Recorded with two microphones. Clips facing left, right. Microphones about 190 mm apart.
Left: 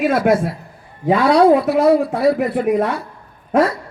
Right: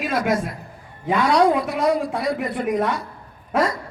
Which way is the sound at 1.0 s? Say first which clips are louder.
Left 5 dB; 30° left (ahead or behind).